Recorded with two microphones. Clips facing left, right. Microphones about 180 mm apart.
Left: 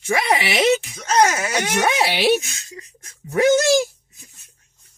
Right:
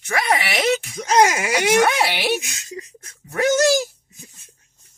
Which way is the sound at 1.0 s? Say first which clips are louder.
Right 1 dB; 10° right (ahead or behind).